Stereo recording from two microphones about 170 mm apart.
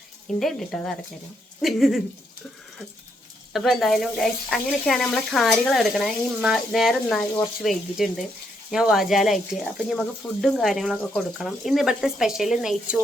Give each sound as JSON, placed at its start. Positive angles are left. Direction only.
{"t": 0.3, "sound": "speech", "side_deg": 0}
{"t": 3.5, "sound": "speech", "side_deg": 0}